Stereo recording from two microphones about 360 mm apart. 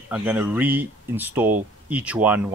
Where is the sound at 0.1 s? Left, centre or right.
Centre.